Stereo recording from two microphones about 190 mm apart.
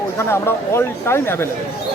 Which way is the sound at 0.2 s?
15° left (ahead or behind).